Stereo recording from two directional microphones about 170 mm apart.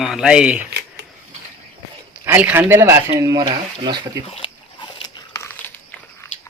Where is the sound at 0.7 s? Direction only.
70° right (ahead or behind).